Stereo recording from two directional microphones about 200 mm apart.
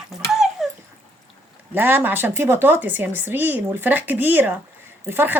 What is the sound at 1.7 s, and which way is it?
A woman's voice, 10° right (ahead or behind).